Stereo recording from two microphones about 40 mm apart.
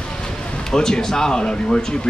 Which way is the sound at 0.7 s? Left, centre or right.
Centre.